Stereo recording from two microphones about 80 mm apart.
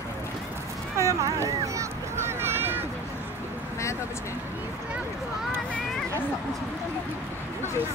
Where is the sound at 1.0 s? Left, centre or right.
Right.